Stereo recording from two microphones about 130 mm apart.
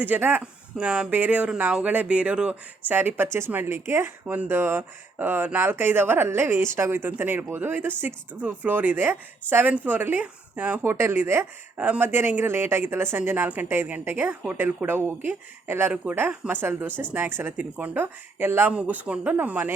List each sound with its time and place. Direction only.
0.0 s speech: 15° right (ahead or behind)